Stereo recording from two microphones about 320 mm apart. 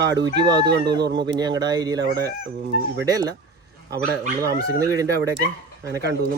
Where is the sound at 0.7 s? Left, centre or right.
Right.